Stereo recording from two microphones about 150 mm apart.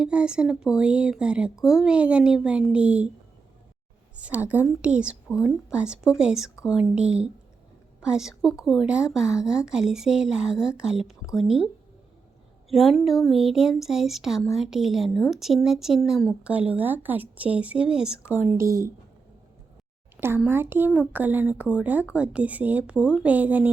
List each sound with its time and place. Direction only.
0.0 s speech: 5° right (ahead or behind)
4.2 s speech: 10° right (ahead or behind)
20.1 s speech: 15° right (ahead or behind)